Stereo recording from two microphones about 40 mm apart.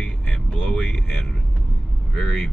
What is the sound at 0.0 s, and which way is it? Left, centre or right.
Vehicle, left.